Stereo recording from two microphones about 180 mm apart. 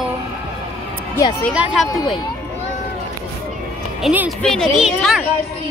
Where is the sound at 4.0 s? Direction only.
5° right (ahead or behind).